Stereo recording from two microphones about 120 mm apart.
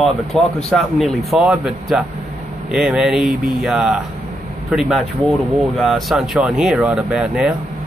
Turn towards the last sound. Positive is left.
turn(degrees=-5)  # may be behind; listen again after turning